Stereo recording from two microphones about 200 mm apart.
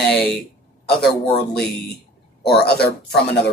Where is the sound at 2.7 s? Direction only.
55° left (ahead or behind).